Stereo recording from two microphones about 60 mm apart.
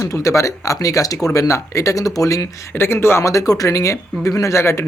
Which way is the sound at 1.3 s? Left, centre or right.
Left.